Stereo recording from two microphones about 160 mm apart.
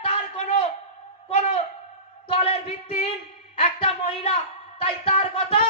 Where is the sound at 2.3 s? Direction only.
40° left (ahead or behind).